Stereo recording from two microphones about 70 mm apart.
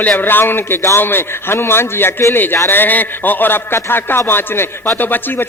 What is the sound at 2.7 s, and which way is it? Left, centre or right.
A man's voice, left.